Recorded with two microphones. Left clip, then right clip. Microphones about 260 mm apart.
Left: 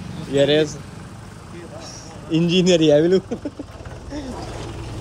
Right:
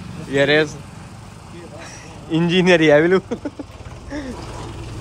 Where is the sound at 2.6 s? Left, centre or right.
Centre.